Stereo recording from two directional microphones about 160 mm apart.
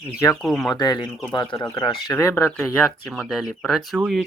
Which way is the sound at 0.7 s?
25° left (ahead or behind).